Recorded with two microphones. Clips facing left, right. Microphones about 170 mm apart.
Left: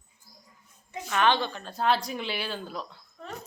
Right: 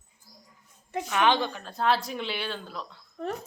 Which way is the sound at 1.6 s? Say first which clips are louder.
Left 2 dB; centre (ahead or behind).